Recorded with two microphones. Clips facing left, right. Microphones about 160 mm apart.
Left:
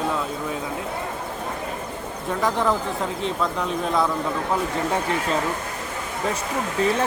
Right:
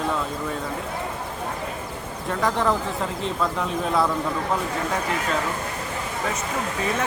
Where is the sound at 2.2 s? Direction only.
Centre (ahead or behind).